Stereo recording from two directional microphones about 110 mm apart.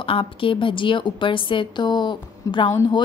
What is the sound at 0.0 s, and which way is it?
A woman's voice, 55° left (ahead or behind).